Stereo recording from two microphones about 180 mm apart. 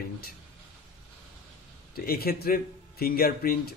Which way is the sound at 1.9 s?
60° left (ahead or behind).